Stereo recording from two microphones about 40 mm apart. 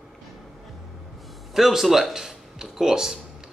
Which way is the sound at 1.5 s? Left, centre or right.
Centre.